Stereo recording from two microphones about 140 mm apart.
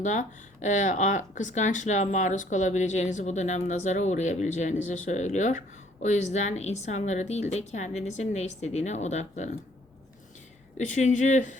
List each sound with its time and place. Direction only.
0.0 s speech: 60° left (ahead or behind)
10.8 s speech: 60° left (ahead or behind)